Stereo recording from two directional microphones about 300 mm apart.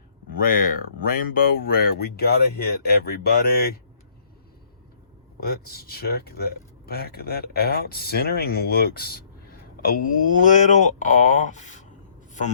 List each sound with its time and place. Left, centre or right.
0.3 s speech: left
5.4 s speech: left